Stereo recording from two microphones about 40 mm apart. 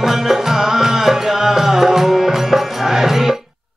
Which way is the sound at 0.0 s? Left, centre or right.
Centre.